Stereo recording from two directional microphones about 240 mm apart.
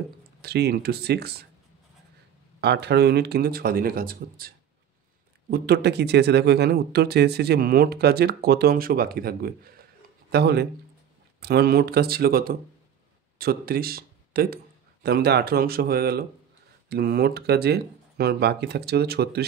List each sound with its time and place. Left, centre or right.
0.4 s speech: right
2.6 s speech: right
5.5 s speech: right